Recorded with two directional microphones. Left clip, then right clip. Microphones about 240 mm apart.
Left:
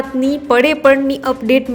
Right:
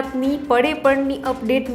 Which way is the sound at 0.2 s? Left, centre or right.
Centre.